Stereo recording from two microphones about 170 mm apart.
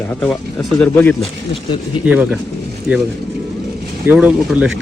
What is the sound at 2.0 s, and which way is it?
Speech, 5° right (ahead or behind).